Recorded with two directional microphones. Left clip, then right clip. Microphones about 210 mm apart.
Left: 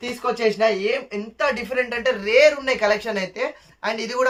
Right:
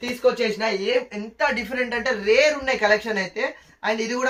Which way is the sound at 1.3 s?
55° left (ahead or behind).